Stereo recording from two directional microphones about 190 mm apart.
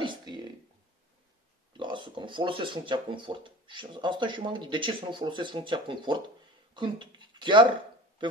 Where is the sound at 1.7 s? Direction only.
25° right (ahead or behind).